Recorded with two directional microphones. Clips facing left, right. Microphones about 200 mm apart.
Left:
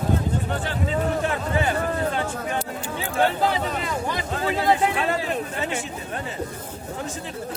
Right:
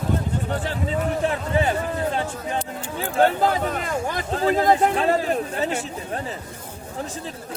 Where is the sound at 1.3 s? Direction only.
30° right (ahead or behind).